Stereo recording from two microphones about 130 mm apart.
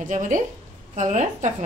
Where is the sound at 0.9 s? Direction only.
70° right (ahead or behind).